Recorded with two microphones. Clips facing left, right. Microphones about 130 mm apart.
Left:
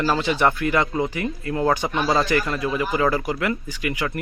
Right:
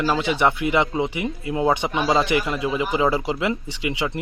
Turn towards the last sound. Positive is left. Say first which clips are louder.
# right 1 dB
turn(degrees=-25)  # may be behind; listen again after turning